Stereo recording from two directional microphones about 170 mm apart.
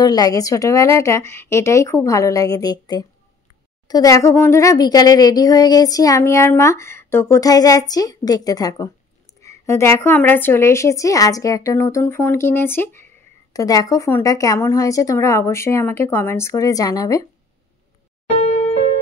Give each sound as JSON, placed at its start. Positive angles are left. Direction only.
{"t": 0.0, "sound": "a woman's voice", "side_deg": 20}